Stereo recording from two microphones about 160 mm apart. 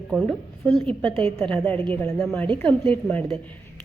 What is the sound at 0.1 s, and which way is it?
A woman's voice, centre (ahead or behind).